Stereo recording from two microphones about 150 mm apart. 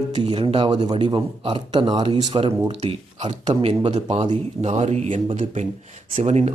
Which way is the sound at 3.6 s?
45° right (ahead or behind).